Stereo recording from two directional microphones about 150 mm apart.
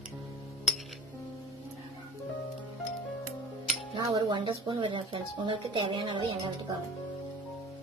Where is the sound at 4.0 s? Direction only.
25° right (ahead or behind).